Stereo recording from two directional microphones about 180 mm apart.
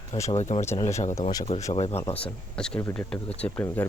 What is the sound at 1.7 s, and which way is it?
Speech, 35° left (ahead or behind).